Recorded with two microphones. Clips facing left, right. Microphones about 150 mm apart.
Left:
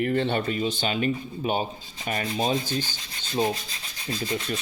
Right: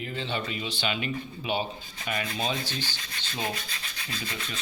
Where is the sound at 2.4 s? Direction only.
40° left (ahead or behind).